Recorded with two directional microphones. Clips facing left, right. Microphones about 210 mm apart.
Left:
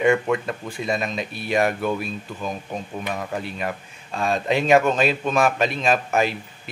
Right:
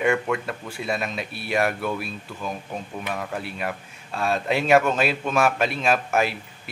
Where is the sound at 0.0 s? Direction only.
5° left (ahead or behind).